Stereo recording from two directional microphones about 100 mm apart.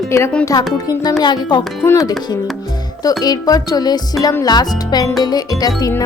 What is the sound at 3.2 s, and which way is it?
Speech, 40° left (ahead or behind).